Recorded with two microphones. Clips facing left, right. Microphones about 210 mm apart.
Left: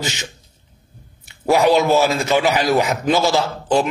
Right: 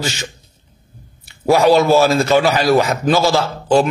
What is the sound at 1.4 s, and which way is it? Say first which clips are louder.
A man's voice: right 3 dB; 20° left (ahead or behind).